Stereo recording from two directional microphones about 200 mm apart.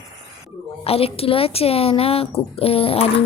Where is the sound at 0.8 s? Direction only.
30° left (ahead or behind).